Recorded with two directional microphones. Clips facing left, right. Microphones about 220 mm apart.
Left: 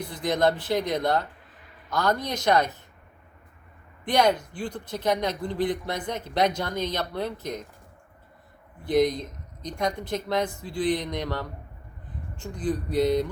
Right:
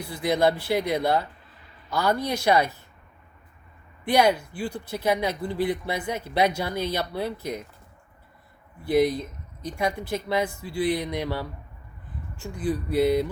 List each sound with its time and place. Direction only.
0.1 s speech: 10° right (ahead or behind)
4.0 s speech: 10° right (ahead or behind)
8.8 s speech: 10° right (ahead or behind)